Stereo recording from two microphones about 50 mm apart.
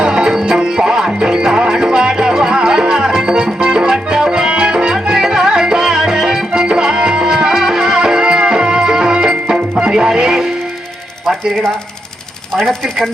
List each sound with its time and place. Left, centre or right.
0.0 s music: centre
12.5 s speech: centre